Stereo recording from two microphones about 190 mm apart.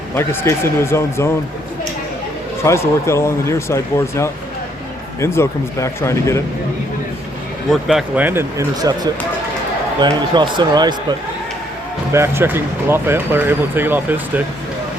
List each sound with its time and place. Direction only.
0.1 s speech: 10° left (ahead or behind)
2.6 s speech: 15° left (ahead or behind)
7.7 s speech: centre (ahead or behind); by 9.0 s 20° right (ahead or behind)
10.0 s speech: 25° right (ahead or behind)
12.1 s speech: 15° right (ahead or behind)